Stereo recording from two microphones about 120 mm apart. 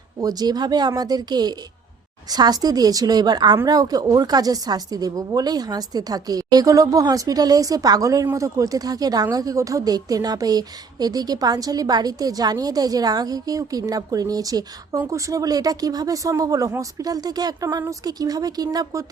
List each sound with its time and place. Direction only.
0.2 s a woman's voice: 30° right (ahead or behind)